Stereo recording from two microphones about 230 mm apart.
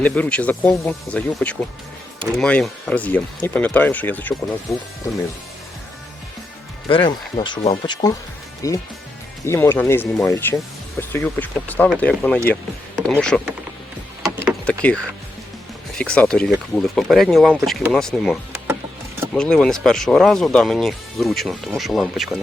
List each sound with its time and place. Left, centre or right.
0.0 s speech: centre
6.8 s speech: left; by 13.5 s centre
14.2 s vehicle: centre
16.0 s speech: centre